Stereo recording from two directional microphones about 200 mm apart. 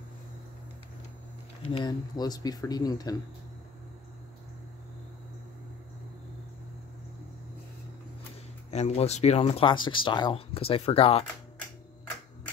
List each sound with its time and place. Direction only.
1.6 s speech: 25° left (ahead or behind)
8.6 s speech: 35° left (ahead or behind)